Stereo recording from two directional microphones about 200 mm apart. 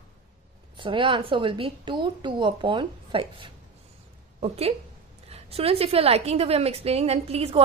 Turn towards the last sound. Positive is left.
turn(degrees=-30)  # may be behind; listen again after turning